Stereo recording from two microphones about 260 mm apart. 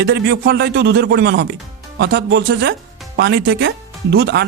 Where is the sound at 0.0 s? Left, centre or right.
Right.